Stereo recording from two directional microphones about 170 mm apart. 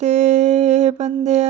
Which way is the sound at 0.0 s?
45° right (ahead or behind).